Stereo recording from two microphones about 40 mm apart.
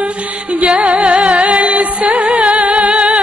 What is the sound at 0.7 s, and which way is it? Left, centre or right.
Music, right.